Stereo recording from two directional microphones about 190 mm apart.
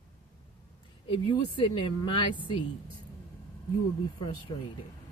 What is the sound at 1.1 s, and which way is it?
Speech, 25° left (ahead or behind).